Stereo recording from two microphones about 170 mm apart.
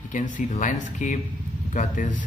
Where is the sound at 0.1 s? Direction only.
50° left (ahead or behind).